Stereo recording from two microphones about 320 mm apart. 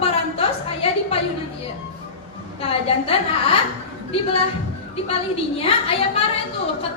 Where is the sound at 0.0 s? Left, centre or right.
Centre.